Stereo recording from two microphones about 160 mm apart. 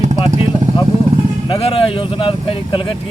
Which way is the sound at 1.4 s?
35° left (ahead or behind).